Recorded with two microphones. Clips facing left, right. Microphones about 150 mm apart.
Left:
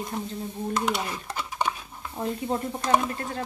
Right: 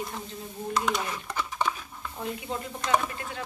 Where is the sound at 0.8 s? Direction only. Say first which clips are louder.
Right 1 dB; 10° left (ahead or behind).